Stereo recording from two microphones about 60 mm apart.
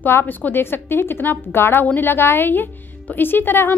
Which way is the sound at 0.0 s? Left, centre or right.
Left.